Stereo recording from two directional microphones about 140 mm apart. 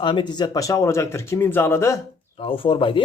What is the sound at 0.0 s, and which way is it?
Speech, 35° left (ahead or behind).